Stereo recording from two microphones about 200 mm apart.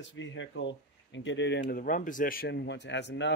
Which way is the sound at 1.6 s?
45° left (ahead or behind).